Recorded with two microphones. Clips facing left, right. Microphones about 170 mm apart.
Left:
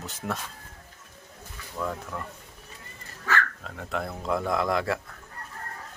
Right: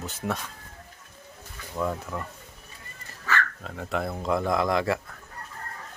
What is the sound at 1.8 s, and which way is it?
Speech, 10° right (ahead or behind).